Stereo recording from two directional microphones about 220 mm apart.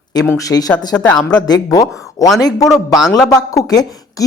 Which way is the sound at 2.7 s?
Centre (ahead or behind).